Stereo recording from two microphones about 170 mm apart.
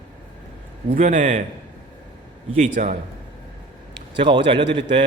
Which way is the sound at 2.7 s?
50° right (ahead or behind).